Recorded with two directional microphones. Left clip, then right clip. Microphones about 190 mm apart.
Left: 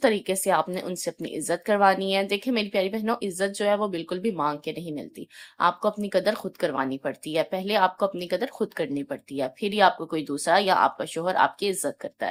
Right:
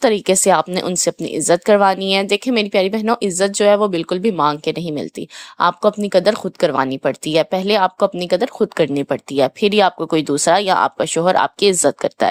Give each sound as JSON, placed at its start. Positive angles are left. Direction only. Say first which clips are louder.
{"t": 0.0, "sound": "speech", "louder": "right 9 dB", "side_deg": -50}